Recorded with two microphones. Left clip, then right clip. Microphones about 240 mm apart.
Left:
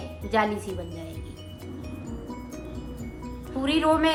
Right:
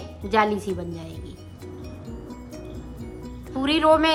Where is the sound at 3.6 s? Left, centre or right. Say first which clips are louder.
Right 4 dB; centre.